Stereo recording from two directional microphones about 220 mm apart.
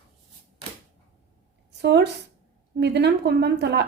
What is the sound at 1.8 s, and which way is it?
A woman's voice, 50° right (ahead or behind).